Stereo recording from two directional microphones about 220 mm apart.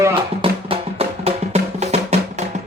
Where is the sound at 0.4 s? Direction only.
25° right (ahead or behind).